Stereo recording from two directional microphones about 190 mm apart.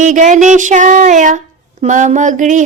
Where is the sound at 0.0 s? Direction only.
40° right (ahead or behind).